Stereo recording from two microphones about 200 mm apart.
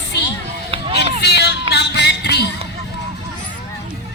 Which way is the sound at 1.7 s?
60° left (ahead or behind).